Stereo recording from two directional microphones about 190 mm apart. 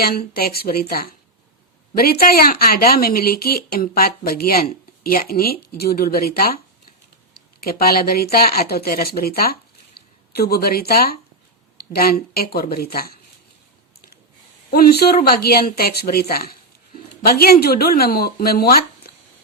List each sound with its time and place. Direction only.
0.0 s speech: 55° left (ahead or behind)
7.6 s speech: 50° left (ahead or behind)
14.7 s speech: 55° left (ahead or behind)